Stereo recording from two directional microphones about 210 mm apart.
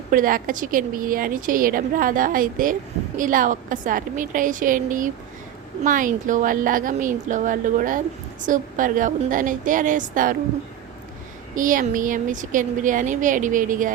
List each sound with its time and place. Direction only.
0.1 s a woman's voice: 40° right (ahead or behind)
11.5 s a woman's voice: 40° right (ahead or behind)